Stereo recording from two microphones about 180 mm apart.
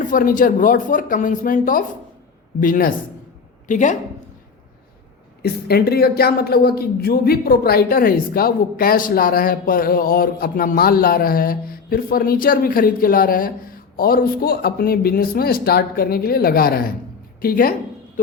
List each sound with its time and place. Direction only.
0.0 s speech: 50° left (ahead or behind)
5.4 s speech: 60° left (ahead or behind)